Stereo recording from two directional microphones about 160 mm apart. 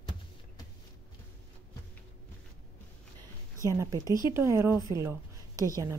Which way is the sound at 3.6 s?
20° right (ahead or behind).